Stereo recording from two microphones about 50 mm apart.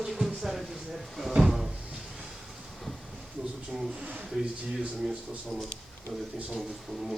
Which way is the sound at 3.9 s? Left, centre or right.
Right.